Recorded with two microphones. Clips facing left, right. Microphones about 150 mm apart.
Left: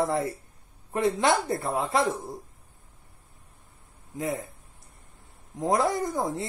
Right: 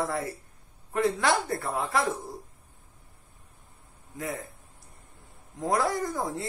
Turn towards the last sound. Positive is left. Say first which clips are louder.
# left 2 dB
turn(degrees=20)  # may be behind; listen again after turning